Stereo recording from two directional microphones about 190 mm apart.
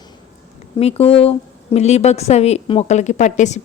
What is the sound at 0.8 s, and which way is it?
A woman's voice, 30° left (ahead or behind).